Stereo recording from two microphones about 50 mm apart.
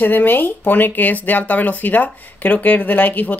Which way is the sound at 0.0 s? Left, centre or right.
Left.